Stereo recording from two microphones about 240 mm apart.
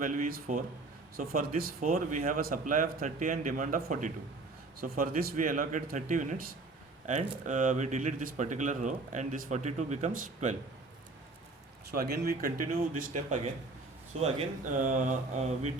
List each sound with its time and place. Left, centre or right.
0.0 s speech: right
11.9 s speech: right